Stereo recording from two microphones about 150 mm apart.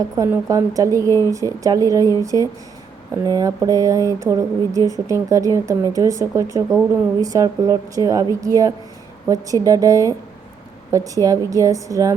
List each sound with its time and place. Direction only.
0.2 s speech: 20° right (ahead or behind)